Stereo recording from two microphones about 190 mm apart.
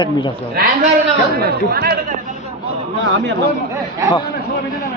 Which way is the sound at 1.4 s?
55° right (ahead or behind).